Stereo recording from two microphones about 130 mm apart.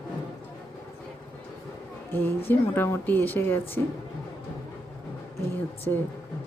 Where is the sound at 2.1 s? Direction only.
15° left (ahead or behind).